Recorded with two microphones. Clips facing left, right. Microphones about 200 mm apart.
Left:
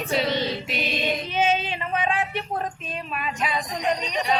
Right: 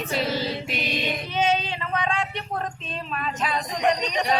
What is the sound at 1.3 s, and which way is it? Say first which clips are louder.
Child singing: right 1 dB; 15° left (ahead or behind).